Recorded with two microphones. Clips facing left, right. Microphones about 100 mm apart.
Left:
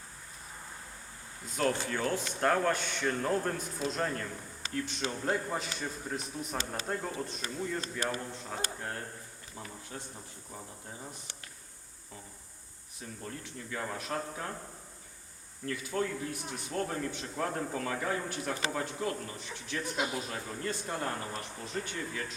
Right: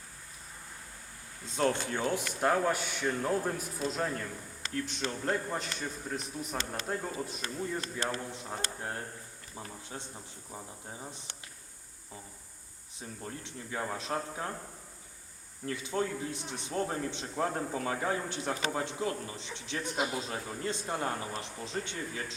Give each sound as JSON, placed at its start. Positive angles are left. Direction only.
{"t": 1.5, "sound": "speech", "side_deg": -25}
{"t": 2.3, "sound": "a man's voice", "side_deg": -5}
{"t": 9.9, "sound": "a man's voice", "side_deg": -30}
{"t": 13.0, "sound": "speech", "side_deg": -25}
{"t": 15.6, "sound": "speech", "side_deg": -20}
{"t": 19.8, "sound": "a man's voice", "side_deg": 0}
{"t": 20.1, "sound": "speech", "side_deg": -25}